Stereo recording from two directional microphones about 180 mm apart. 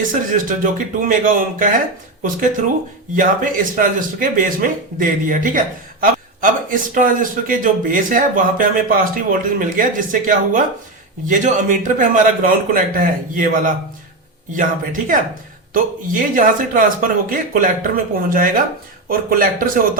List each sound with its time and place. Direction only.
0.0 s speech: 50° right (ahead or behind)
3.2 s speech: 45° right (ahead or behind)